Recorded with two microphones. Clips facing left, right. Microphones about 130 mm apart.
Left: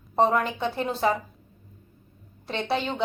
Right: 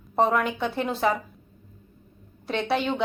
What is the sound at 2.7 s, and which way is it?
Speech, centre (ahead or behind).